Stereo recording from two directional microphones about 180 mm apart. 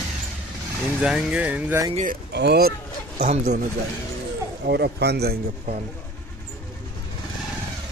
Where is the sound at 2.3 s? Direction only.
70° right (ahead or behind).